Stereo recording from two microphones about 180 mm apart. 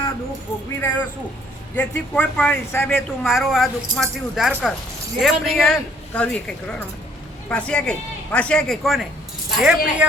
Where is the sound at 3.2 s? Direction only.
Centre (ahead or behind).